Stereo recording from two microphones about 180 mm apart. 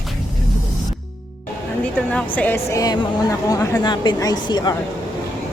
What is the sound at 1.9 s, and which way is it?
A woman's voice, 10° left (ahead or behind).